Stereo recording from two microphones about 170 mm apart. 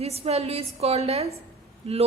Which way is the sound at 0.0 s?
35° right (ahead or behind).